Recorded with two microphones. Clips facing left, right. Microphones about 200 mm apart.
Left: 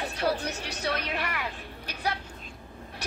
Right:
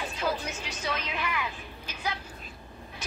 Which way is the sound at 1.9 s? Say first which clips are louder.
Left 3 dB; 65° left (ahead or behind).